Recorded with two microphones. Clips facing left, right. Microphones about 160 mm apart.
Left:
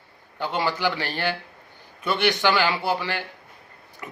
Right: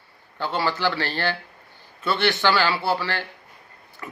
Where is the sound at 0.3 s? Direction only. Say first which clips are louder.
Right 1 dB; 15° left (ahead or behind).